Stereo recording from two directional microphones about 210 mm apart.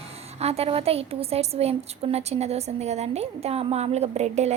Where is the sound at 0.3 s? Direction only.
30° right (ahead or behind).